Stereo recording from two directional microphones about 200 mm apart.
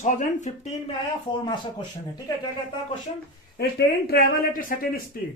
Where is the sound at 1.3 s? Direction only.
25° left (ahead or behind).